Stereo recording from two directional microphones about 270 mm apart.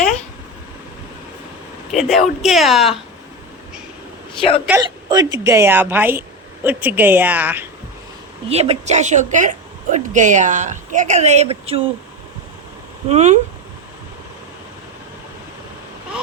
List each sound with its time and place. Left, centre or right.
1.9 s speech: centre
4.4 s speech: centre
4.6 s speech: centre
8.4 s a woman's voice: right
13.1 s a woman's voice: right